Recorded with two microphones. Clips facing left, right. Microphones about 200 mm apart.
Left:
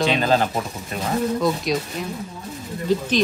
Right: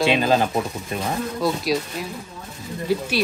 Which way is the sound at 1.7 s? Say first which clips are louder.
Right 1 dB; 5° right (ahead or behind).